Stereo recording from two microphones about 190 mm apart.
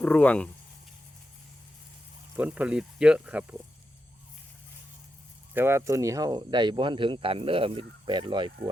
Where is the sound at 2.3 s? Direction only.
10° right (ahead or behind).